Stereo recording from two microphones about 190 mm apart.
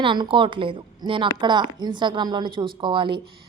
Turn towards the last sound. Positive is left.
turn(degrees=-25)  # may be behind; listen again after turning